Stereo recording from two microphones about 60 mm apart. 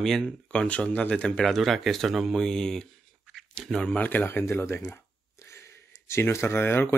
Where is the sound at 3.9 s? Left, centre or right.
Left.